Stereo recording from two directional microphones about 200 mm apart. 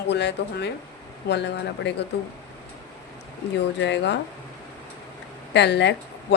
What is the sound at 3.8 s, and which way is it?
Speech, 60° left (ahead or behind).